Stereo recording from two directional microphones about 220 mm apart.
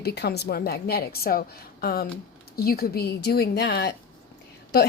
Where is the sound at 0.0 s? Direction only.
45° left (ahead or behind).